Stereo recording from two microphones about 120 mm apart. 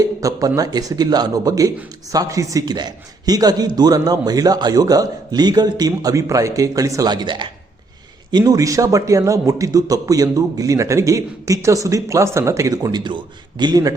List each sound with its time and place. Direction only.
0.0 s a man's voice: 30° right (ahead or behind)